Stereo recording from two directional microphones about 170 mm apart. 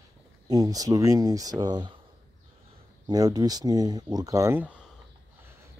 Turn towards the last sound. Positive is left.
turn(degrees=-10)  # may be behind; listen again after turning